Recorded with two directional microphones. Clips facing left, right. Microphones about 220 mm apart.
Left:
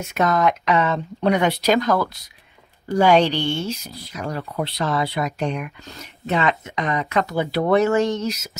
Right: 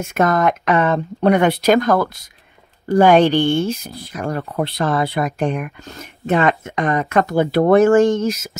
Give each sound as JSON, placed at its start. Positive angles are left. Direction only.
{"t": 0.0, "sound": "speech", "side_deg": -50}